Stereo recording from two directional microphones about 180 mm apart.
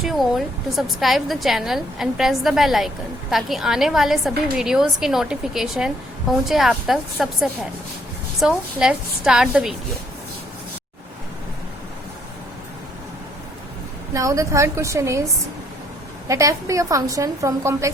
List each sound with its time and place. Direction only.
0.0 s speech: centre (ahead or behind)
8.4 s speech: 5° right (ahead or behind)
14.1 s a woman's voice: 15° right (ahead or behind)
16.3 s a woman's voice: 15° right (ahead or behind)